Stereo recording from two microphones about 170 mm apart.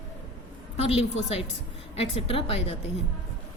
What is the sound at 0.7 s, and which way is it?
A woman's voice, 35° left (ahead or behind).